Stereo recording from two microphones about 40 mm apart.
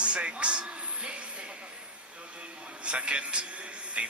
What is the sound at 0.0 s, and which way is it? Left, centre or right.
Music, right.